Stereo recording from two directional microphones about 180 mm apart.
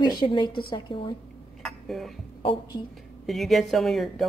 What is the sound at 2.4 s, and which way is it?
Speech, 25° left (ahead or behind).